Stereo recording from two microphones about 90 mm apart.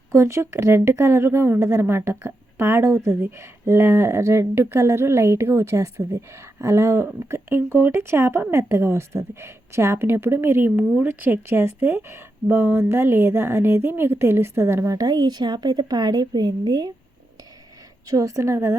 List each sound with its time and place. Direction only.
0.1 s a woman's voice: 30° right (ahead or behind)
14.9 s a woman's voice: 50° right (ahead or behind)
18.1 s a woman's voice: 35° right (ahead or behind)